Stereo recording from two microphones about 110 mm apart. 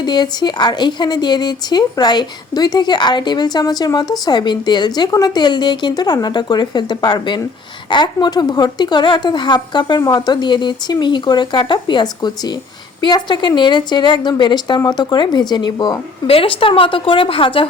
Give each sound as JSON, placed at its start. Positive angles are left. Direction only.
{"t": 0.0, "sound": "a woman's voice", "side_deg": 40}
{"t": 16.2, "sound": "a woman's voice", "side_deg": 55}